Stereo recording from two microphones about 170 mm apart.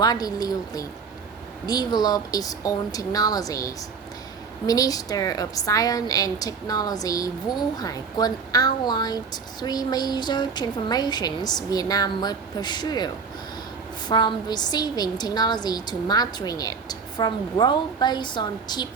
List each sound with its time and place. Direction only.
0.0 s a woman's voice: 20° left (ahead or behind)
14.1 s a woman's voice: 25° left (ahead or behind)